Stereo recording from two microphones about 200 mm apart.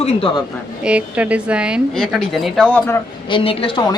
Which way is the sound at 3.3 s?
25° left (ahead or behind).